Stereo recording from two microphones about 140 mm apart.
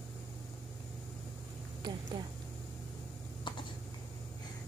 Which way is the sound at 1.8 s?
35° right (ahead or behind).